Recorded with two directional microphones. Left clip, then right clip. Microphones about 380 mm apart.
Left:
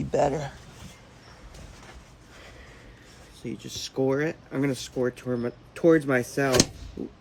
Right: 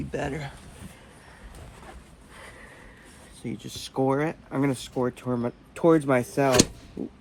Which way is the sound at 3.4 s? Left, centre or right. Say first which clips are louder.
Left 1 dB; centre.